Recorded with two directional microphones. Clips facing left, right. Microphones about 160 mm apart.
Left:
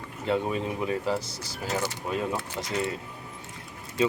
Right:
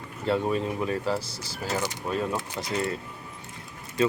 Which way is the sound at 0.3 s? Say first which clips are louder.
Right 2 dB; 20° left (ahead or behind).